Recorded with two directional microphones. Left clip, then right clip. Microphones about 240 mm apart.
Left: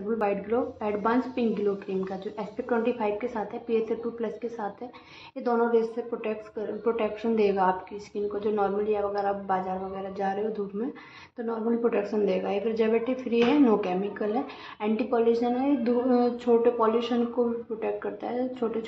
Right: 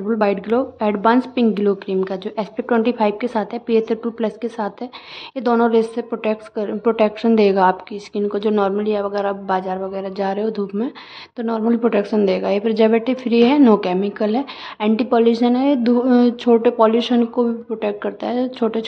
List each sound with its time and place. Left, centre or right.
0.2 s a woman's voice: right